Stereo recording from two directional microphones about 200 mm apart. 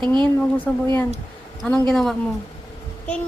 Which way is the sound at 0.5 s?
10° left (ahead or behind).